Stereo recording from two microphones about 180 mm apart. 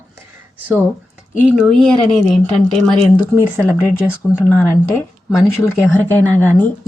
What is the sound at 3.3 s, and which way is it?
Speech, 10° right (ahead or behind).